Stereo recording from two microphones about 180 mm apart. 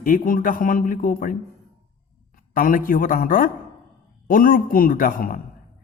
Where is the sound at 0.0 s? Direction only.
50° left (ahead or behind).